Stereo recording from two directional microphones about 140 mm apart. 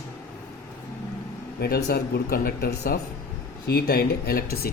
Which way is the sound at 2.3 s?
90° left.